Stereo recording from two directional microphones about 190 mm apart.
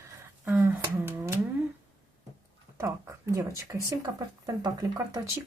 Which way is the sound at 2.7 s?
15° right (ahead or behind).